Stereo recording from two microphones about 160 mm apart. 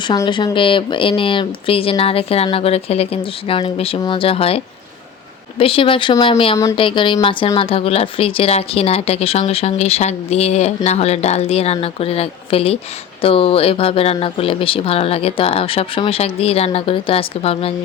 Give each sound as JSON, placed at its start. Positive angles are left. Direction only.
{"t": 0.1, "sound": "speech", "side_deg": 30}